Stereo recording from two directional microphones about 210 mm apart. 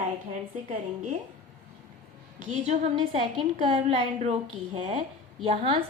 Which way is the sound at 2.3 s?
35° right (ahead or behind).